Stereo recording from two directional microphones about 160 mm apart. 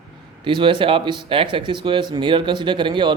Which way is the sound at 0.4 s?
30° right (ahead or behind).